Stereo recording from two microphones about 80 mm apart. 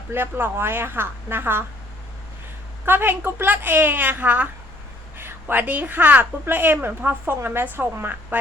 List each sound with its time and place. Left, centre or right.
0.1 s a woman's voice: right
2.8 s a woman's voice: right